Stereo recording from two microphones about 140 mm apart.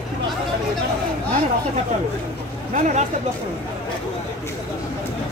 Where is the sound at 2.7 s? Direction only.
65° right (ahead or behind).